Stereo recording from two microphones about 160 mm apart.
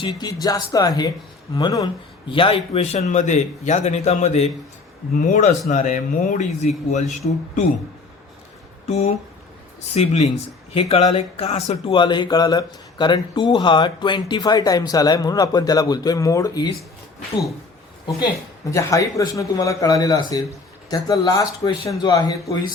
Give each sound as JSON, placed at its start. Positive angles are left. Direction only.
{"t": 0.0, "sound": "speech", "side_deg": 25}
{"t": 2.3, "sound": "speech", "side_deg": 35}
{"t": 8.9, "sound": "speech", "side_deg": 40}
{"t": 18.7, "sound": "speech", "side_deg": 20}